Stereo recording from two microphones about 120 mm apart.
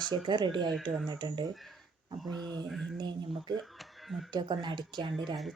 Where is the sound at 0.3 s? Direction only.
40° right (ahead or behind).